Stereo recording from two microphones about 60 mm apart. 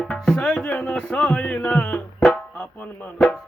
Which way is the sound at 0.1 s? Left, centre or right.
Centre.